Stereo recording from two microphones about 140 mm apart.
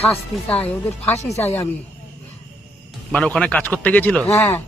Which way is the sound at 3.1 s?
5° left (ahead or behind).